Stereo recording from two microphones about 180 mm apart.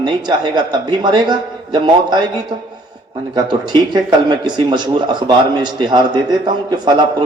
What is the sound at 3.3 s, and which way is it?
A man's voice, 25° right (ahead or behind).